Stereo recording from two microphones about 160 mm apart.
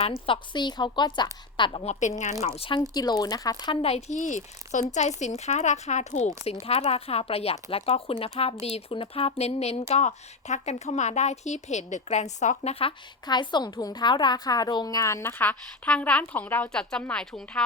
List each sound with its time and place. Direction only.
0.3 s a woman's voice: 30° left (ahead or behind)
2.9 s a woman's voice: 25° left (ahead or behind); by 12.9 s 45° left (ahead or behind)
13.2 s a woman's voice: 30° left (ahead or behind); by 17.6 s 5° left (ahead or behind)